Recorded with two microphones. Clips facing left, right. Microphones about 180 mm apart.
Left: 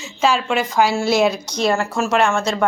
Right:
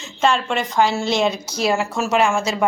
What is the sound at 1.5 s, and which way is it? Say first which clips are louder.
Speech: left 1 dB; 5° right (ahead or behind).